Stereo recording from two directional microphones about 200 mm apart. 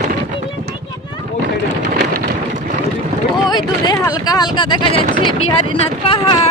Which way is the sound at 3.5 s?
20° left (ahead or behind).